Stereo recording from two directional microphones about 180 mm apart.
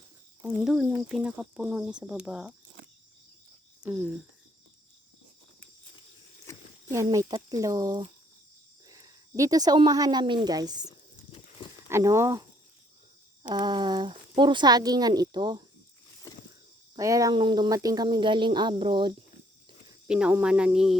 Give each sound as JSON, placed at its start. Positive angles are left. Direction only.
{"t": 0.6, "sound": "speech", "side_deg": 0}
{"t": 3.8, "sound": "speech", "side_deg": -10}
{"t": 6.5, "sound": "a sound", "side_deg": 15}
{"t": 6.9, "sound": "speech", "side_deg": -15}
{"t": 11.3, "sound": "livestock", "side_deg": 30}
{"t": 11.9, "sound": "speech", "side_deg": -15}
{"t": 13.5, "sound": "speech", "side_deg": -25}
{"t": 16.9, "sound": "speech", "side_deg": -20}
{"t": 20.1, "sound": "speech", "side_deg": -5}